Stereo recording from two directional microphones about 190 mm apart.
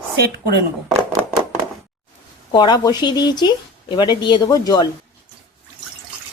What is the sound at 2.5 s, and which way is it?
Speech, 20° left (ahead or behind).